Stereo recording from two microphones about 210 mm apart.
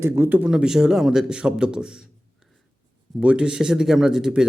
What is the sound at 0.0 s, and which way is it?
A man's voice, 10° right (ahead or behind).